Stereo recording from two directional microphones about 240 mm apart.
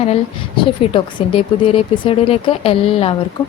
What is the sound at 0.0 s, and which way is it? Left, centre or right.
Speech, left.